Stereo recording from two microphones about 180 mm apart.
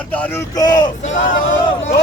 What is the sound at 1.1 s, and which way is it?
Speech, 90° left.